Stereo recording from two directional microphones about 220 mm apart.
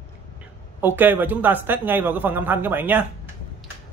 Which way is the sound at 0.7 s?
10° right (ahead or behind).